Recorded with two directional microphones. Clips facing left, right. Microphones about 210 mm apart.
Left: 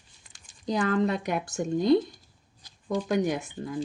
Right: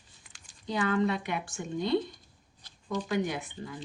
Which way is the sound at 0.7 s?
40° left (ahead or behind).